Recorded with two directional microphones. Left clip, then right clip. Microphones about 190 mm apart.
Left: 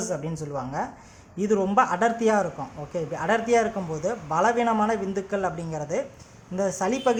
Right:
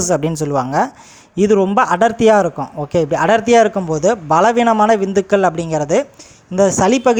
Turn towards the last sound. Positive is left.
turn(degrees=-40)  # may be behind; listen again after turning